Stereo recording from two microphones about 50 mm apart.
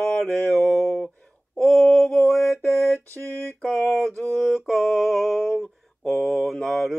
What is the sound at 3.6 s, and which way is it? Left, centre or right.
Speech, centre.